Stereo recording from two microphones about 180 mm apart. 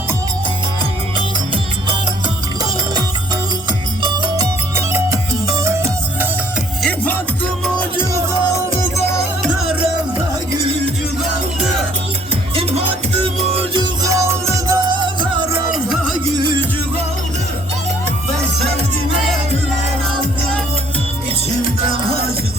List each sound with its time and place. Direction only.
4.0 s music: 15° right (ahead or behind)
6.8 s music: 10° left (ahead or behind)
13.6 s music: 25° right (ahead or behind)
15.7 s music: centre (ahead or behind)